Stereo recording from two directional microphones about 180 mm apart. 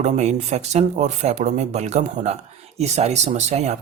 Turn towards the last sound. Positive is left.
turn(degrees=-40)  # may be behind; listen again after turning